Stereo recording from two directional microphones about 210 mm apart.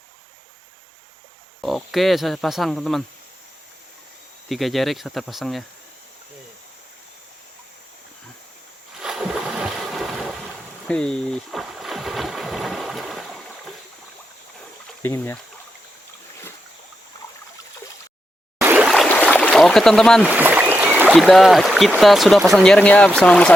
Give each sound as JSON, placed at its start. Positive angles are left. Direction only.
{"t": 1.6, "sound": "speech", "side_deg": 0}
{"t": 4.4, "sound": "speech", "side_deg": 0}
{"t": 9.0, "sound": "boat", "side_deg": -5}
{"t": 15.0, "sound": "speech", "side_deg": 10}
{"t": 18.6, "sound": "speech", "side_deg": -10}